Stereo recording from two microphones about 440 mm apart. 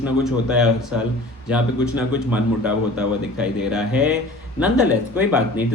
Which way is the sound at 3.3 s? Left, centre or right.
Centre.